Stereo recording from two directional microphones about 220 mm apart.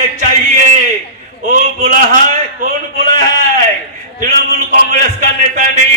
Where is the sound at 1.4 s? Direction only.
35° right (ahead or behind).